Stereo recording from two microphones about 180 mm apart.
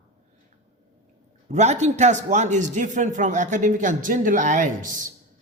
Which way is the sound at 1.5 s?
40° right (ahead or behind).